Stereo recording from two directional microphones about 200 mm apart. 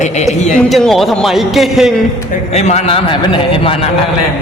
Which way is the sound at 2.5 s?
35° left (ahead or behind).